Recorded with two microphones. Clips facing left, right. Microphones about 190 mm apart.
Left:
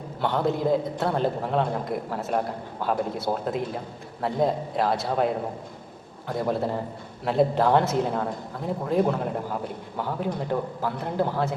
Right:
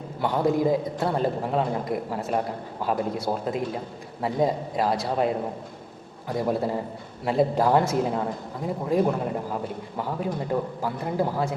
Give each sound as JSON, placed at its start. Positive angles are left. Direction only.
{"t": 0.2, "sound": "speech", "side_deg": 0}